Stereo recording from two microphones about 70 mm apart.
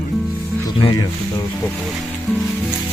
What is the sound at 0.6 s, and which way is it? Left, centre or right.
Speech, left.